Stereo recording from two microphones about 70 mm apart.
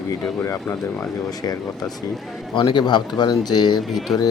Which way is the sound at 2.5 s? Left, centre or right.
Left.